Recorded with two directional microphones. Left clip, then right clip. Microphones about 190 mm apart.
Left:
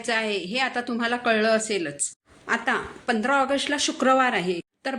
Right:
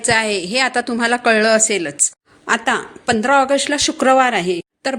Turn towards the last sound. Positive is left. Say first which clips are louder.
# right 8 dB
turn(degrees=-40)  # may be behind; listen again after turning